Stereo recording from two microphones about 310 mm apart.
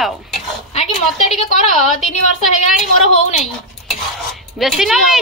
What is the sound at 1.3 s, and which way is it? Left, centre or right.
A woman's voice, left.